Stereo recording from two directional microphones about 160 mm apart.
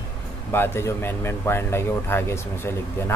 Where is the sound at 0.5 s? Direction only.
15° left (ahead or behind).